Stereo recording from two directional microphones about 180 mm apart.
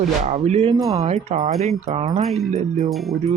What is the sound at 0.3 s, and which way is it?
Speech, 40° right (ahead or behind).